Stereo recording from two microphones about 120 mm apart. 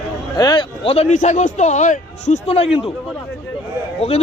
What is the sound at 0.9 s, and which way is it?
A man's voice, 60° left (ahead or behind).